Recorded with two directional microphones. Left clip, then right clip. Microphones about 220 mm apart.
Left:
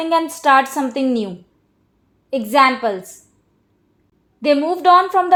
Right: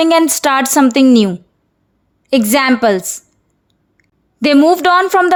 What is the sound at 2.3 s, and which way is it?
Speech, 45° right (ahead or behind).